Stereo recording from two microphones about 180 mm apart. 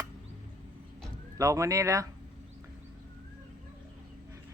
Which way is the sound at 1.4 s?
20° right (ahead or behind).